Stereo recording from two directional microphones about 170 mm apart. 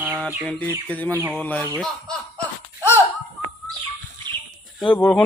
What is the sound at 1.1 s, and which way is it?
Speech, 10° right (ahead or behind).